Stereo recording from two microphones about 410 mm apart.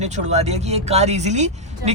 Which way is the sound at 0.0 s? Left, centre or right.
Centre.